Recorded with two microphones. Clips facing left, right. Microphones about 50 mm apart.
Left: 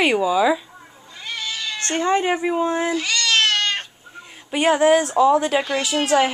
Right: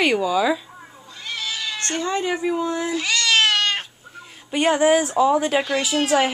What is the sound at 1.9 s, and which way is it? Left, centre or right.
Speech, left.